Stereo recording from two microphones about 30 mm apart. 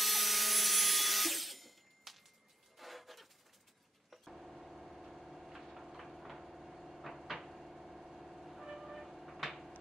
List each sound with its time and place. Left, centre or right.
0.0 s music: centre
2.8 s vehicle: centre
4.1 s a sound: centre